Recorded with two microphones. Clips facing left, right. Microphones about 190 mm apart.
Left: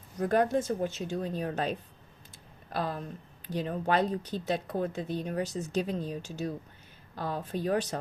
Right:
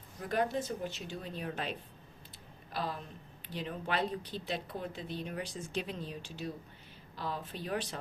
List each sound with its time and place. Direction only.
0.2 s speech: 50° left (ahead or behind)
2.7 s speech: 50° left (ahead or behind)